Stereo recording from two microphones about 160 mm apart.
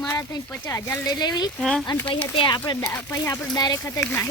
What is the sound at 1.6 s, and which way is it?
Speech, centre (ahead or behind).